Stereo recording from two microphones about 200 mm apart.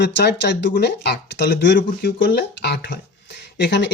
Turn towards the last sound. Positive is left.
turn(degrees=60)  # may be behind; listen again after turning